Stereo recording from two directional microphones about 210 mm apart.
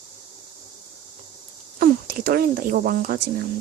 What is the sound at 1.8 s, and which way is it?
Speech, 45° right (ahead or behind).